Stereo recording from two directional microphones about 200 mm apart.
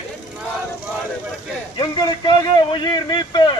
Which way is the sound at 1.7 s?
20° left (ahead or behind).